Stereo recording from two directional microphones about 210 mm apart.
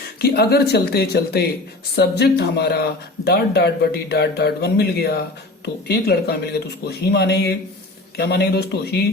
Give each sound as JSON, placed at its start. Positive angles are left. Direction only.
{"t": 0.2, "sound": "speech", "side_deg": 50}